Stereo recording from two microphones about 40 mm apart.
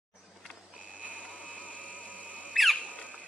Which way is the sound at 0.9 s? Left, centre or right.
Right.